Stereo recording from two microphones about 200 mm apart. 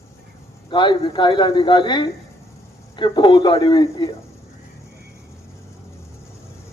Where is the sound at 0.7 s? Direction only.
25° left (ahead or behind).